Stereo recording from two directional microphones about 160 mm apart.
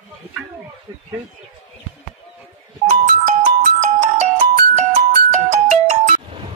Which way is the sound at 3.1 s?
50° right (ahead or behind).